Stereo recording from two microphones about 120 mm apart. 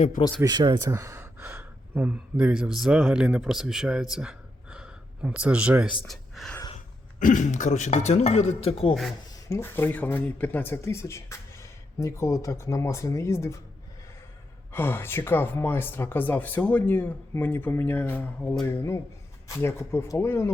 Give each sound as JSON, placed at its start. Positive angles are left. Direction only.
{"t": 0.4, "sound": "speech", "side_deg": -35}
{"t": 6.1, "sound": "a sound", "side_deg": 0}
{"t": 7.2, "sound": "speech", "side_deg": 90}
{"t": 9.5, "sound": "speech", "side_deg": 20}
{"t": 14.7, "sound": "speech", "side_deg": 20}